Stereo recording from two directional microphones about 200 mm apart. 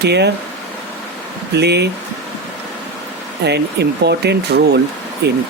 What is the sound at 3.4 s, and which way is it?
Speech, 55° right (ahead or behind).